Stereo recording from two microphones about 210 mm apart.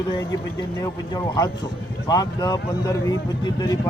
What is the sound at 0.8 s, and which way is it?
Speech, 20° left (ahead or behind).